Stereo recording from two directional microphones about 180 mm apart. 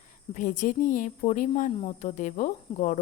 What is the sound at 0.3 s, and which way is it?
Speech, 50° left (ahead or behind).